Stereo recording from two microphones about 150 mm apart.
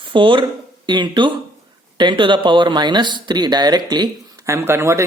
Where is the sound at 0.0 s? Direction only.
35° right (ahead or behind).